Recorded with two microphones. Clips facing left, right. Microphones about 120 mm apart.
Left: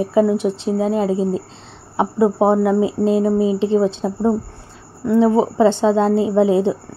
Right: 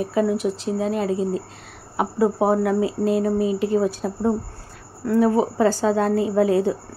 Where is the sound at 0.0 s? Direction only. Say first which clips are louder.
Left 5 dB; 25° left (ahead or behind).